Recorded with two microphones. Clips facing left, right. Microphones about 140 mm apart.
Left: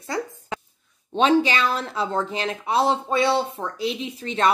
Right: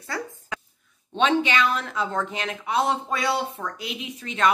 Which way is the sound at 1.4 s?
35° left (ahead or behind).